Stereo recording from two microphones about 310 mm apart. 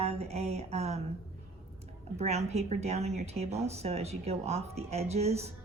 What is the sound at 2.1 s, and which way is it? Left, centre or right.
A woman's voice, right.